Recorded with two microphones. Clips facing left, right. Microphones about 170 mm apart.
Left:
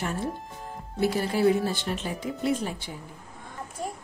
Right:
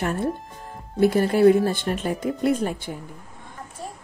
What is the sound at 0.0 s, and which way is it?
Speech, 55° right (ahead or behind).